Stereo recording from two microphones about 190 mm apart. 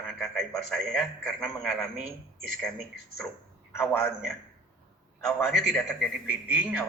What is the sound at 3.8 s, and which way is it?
Speech, 10° left (ahead or behind).